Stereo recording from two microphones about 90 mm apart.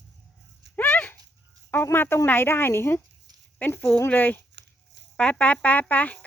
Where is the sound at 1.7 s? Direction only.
25° left (ahead or behind).